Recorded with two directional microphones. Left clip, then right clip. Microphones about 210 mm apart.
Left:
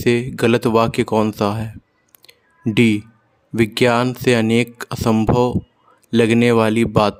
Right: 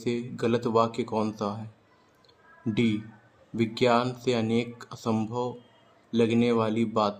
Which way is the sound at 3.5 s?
50° left (ahead or behind).